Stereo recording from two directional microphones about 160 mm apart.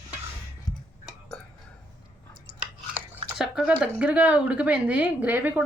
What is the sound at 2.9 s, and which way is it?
Speech, 5° right (ahead or behind).